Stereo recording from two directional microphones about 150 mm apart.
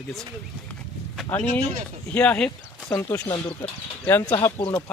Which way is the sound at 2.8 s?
20° left (ahead or behind).